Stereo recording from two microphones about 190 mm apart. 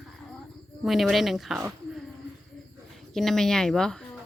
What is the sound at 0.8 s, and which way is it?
Speech, centre (ahead or behind).